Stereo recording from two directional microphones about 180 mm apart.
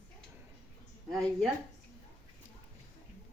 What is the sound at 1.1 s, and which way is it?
Speech, centre (ahead or behind).